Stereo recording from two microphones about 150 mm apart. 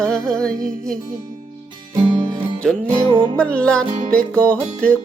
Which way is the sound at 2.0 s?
35° right (ahead or behind).